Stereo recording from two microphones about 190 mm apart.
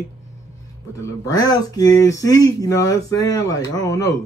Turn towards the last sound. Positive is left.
turn(degrees=15)  # may be behind; listen again after turning